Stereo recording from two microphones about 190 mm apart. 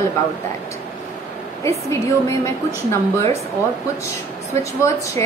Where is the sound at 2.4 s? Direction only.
15° left (ahead or behind).